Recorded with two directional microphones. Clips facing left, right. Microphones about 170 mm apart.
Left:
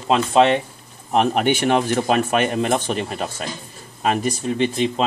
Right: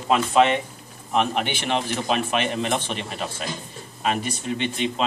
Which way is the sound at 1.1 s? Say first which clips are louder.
Left 5 dB; 45° left (ahead or behind).